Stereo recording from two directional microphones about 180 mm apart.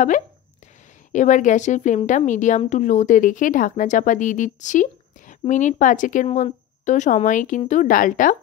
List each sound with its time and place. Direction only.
1.1 s a woman's voice: 45° left (ahead or behind)